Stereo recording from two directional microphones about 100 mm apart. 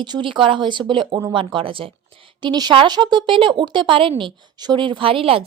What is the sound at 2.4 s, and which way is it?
A woman's voice, 45° right (ahead or behind).